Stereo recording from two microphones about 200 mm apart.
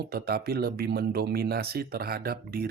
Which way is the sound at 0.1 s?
50° right (ahead or behind).